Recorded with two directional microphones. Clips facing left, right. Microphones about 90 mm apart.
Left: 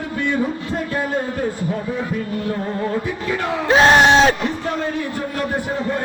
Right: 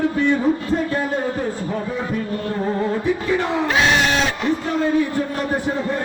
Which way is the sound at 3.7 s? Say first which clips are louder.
Left 8 dB; 40° left (ahead or behind).